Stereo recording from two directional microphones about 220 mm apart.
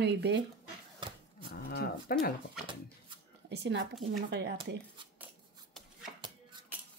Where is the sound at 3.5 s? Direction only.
50° right (ahead or behind).